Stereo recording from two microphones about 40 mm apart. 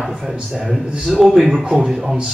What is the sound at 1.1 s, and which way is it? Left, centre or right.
Speech, centre.